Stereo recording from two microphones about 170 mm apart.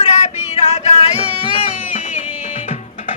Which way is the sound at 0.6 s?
40° left (ahead or behind).